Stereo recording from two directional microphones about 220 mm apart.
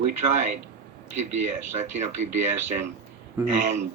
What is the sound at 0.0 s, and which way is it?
Speech, 35° right (ahead or behind).